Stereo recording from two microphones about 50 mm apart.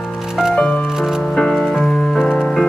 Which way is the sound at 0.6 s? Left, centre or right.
Centre.